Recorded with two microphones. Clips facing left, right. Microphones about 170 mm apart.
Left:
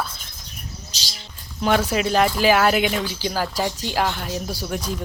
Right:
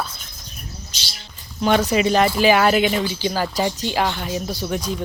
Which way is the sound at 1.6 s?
5° left (ahead or behind).